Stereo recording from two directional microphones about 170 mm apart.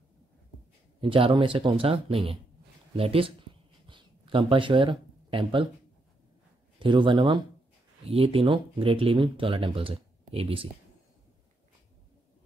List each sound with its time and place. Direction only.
1.0 s speech: 30° right (ahead or behind)
3.8 s a sound: 30° right (ahead or behind)
6.8 s speech: 30° right (ahead or behind)